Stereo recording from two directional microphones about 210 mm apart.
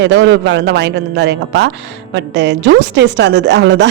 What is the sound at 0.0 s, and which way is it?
Speech, 55° right (ahead or behind).